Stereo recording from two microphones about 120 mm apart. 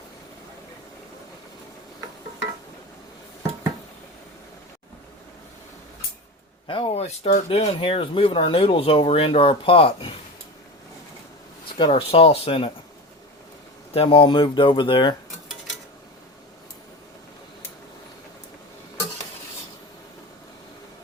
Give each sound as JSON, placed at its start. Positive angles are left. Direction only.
{"t": 6.7, "sound": "speech", "side_deg": 45}
{"t": 11.9, "sound": "speech", "side_deg": 50}
{"t": 13.9, "sound": "speech", "side_deg": 50}